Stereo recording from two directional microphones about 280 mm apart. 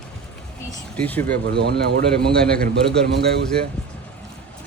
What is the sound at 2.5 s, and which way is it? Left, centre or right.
Speech, right.